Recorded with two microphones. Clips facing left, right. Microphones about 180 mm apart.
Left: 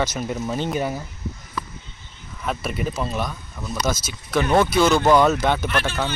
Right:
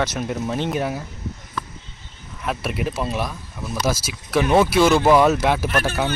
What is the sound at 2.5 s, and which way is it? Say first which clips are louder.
Speech: right 1 dB; centre (ahead or behind).